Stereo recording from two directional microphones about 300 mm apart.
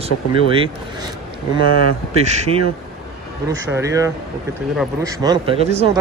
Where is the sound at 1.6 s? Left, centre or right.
Left.